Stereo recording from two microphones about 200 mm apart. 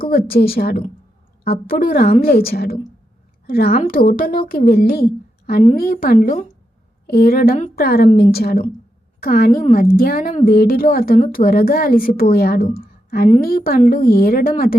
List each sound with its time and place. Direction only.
0.0 s a woman's voice: 50° left (ahead or behind)
12.7 s a sound: 50° left (ahead or behind)
13.4 s a woman's voice: 50° left (ahead or behind)